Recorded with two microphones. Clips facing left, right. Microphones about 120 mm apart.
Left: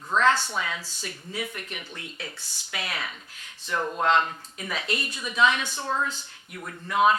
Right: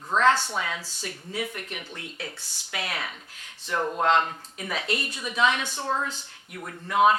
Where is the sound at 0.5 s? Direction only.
40° right (ahead or behind).